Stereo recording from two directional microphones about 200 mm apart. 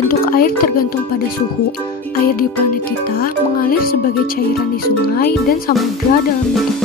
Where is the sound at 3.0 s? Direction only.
45° left (ahead or behind).